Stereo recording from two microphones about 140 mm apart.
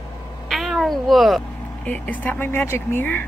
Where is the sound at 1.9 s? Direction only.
10° left (ahead or behind).